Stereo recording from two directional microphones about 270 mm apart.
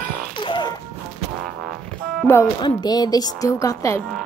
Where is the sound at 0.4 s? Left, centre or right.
Centre.